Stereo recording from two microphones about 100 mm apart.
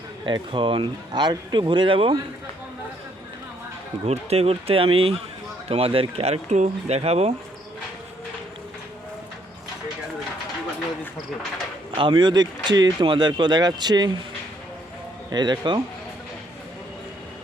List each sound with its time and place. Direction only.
0.3 s speech: 55° right (ahead or behind)
4.0 s speech: 90° right
6.8 s speech: 90° right
11.9 s speech: 55° right (ahead or behind)
15.3 s speech: 45° right (ahead or behind)